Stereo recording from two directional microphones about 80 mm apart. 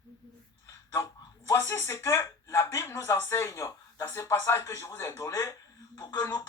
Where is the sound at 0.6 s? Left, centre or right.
Left.